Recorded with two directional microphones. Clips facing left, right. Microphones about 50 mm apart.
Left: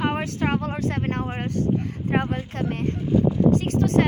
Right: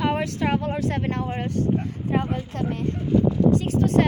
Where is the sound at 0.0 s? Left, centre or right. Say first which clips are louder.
Right 1 dB; left.